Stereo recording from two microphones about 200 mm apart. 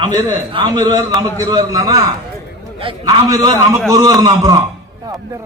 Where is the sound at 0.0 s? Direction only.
15° right (ahead or behind).